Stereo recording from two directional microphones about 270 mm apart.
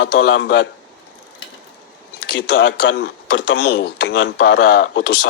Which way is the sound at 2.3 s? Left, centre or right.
Left.